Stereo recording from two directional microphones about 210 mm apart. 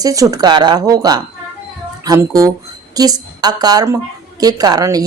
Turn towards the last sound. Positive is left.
turn(degrees=-15)  # may be behind; listen again after turning